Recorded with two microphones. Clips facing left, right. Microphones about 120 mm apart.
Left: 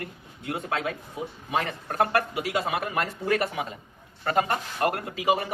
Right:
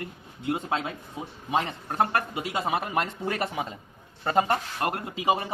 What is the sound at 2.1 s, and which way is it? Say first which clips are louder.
Speech: left 2 dB; 20° right (ahead or behind).